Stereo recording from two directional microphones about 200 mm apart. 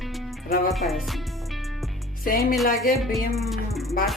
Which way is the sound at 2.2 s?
45° left (ahead or behind).